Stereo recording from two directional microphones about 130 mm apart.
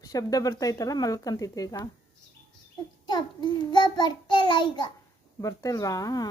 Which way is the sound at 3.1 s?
35° left (ahead or behind).